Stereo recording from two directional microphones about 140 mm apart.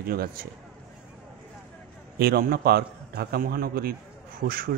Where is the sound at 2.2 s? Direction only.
90° right.